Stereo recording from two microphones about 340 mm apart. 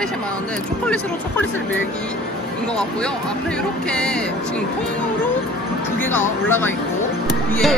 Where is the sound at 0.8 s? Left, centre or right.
Centre.